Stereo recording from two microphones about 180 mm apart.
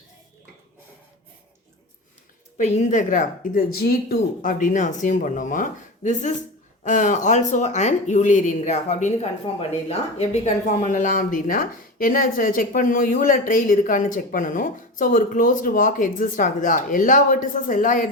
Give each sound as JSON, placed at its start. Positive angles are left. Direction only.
{"t": 2.6, "sound": "speech", "side_deg": 40}